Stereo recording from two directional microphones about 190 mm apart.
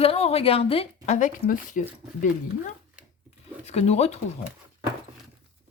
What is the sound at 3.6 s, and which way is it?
Speech, 35° left (ahead or behind).